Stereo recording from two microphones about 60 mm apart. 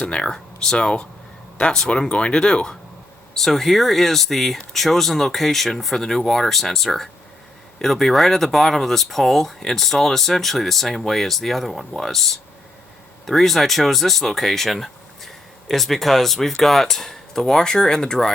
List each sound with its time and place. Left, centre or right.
0.0 s speech: centre